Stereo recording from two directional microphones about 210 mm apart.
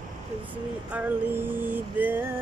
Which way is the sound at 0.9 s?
10° right (ahead or behind).